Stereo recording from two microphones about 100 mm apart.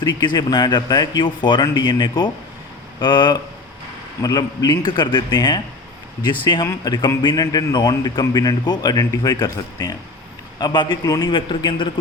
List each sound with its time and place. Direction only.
0.0 s a man's voice: 45° left (ahead or behind)
11.0 s a man's voice: 35° left (ahead or behind)
11.3 s speech: 50° left (ahead or behind)